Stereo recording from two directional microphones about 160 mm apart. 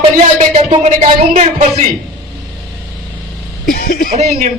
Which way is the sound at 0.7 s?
45° right (ahead or behind).